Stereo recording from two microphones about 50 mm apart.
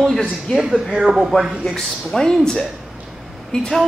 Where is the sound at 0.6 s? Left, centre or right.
Centre.